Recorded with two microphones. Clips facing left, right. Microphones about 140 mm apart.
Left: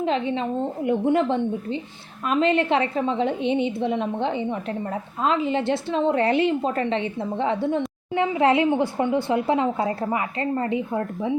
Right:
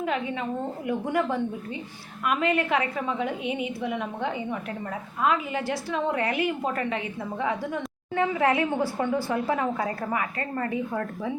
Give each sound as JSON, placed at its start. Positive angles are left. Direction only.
{"t": 0.0, "sound": "a woman's voice", "side_deg": 25}